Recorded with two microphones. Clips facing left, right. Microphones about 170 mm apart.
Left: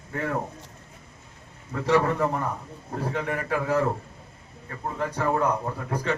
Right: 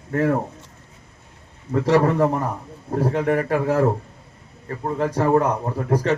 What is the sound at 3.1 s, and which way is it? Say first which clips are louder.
Speech: right 6 dB; 50° right (ahead or behind).